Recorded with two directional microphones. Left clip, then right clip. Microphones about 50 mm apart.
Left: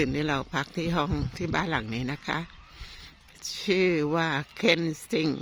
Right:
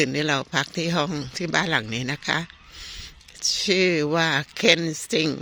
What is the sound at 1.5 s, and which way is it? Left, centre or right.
Speech, centre.